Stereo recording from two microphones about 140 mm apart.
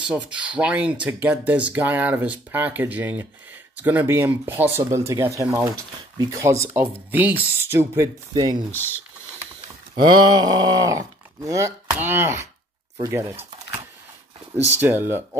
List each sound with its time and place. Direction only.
0.0 s speech: 10° right (ahead or behind); by 8.6 s 30° right (ahead or behind)
9.9 s speech: 30° right (ahead or behind)
14.8 s speech: 15° right (ahead or behind)